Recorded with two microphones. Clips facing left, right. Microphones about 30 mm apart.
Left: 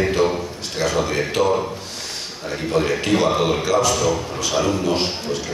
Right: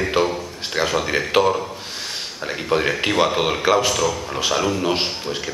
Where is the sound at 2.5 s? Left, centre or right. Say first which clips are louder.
Even; right.